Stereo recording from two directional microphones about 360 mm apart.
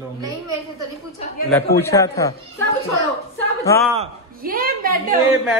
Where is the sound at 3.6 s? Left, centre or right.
Centre.